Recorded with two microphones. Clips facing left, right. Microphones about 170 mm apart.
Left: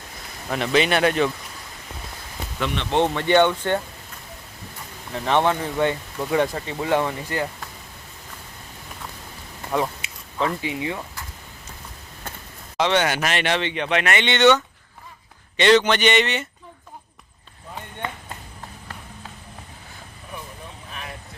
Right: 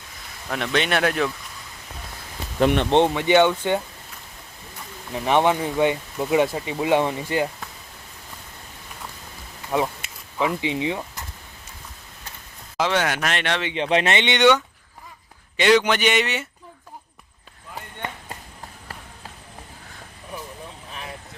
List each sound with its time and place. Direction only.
0.5 s speech: centre (ahead or behind)
3.0 s speech: 15° right (ahead or behind)
5.1 s speech: 15° right (ahead or behind)
10.3 s speech: 10° right (ahead or behind)
12.7 s speech: centre (ahead or behind)
13.7 s speech: 30° right (ahead or behind); by 16.5 s 5° right (ahead or behind)